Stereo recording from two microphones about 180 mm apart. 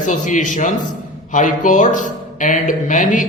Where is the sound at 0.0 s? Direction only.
45° left (ahead or behind).